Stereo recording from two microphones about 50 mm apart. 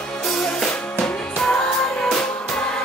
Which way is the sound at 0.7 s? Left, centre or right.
Centre.